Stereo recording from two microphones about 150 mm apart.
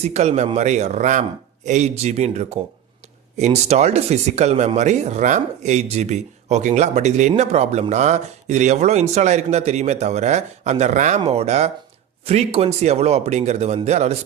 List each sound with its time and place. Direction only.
0.0 s speech: 50° right (ahead or behind)